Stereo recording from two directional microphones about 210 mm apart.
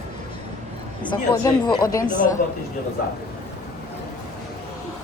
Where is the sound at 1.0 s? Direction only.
20° left (ahead or behind).